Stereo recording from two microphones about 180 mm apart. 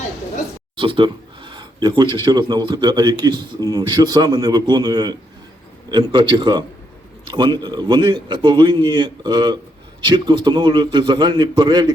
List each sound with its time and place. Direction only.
0.8 s speech: 25° right (ahead or behind)